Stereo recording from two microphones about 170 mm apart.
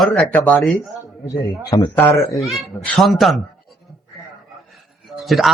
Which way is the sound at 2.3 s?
Centre (ahead or behind).